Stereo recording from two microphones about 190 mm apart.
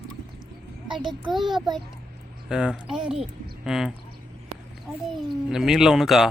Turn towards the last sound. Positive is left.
turn(degrees=0)  # may be behind; listen again after turning